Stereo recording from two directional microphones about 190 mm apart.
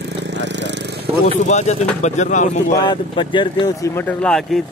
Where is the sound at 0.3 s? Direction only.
70° right (ahead or behind).